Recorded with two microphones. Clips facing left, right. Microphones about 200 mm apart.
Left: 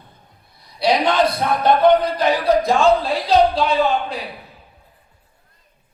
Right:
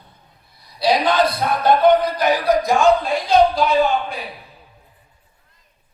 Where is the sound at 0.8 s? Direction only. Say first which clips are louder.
Even; 25° left (ahead or behind).